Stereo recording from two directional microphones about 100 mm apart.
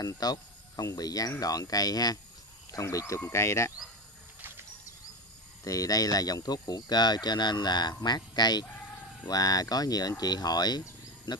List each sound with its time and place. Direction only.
0.0 s speech: 40° left (ahead or behind)
4.4 s a sound: 20° right (ahead or behind)
5.6 s speech: 35° left (ahead or behind); by 11.4 s 50° left (ahead or behind)